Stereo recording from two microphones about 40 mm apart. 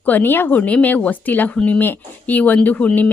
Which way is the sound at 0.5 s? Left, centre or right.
Left.